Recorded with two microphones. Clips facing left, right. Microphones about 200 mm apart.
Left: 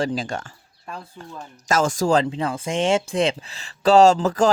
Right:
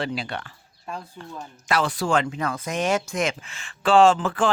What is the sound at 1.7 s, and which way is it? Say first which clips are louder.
Speech: left 4 dB; 45° left (ahead or behind).